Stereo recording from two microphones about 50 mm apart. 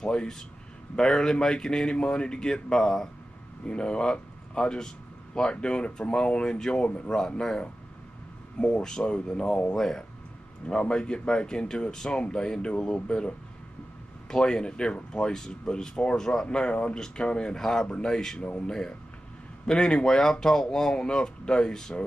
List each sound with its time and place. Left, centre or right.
0.0 s speech: centre
8.8 s speech: centre
14.3 s speech: centre